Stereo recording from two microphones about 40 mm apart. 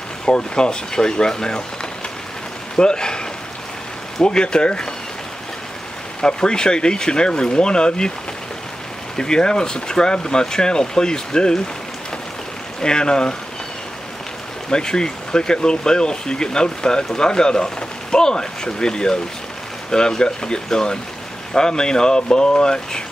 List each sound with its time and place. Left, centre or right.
0.2 s speech: left
2.8 s speech: centre
4.2 s speech: left
6.2 s speech: centre
9.1 s speech: centre
12.8 s speech: left
14.7 s speech: centre